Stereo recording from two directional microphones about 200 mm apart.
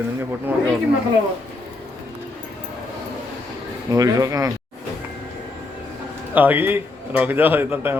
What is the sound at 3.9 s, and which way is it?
Speech, 15° right (ahead or behind).